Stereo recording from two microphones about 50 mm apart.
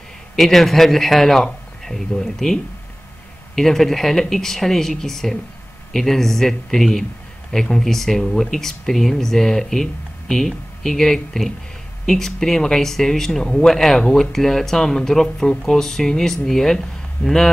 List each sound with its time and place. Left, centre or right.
0.4 s a man's voice: centre
14.3 s speech: centre